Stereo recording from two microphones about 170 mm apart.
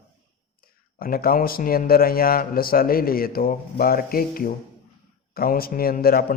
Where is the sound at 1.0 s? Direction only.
60° left (ahead or behind).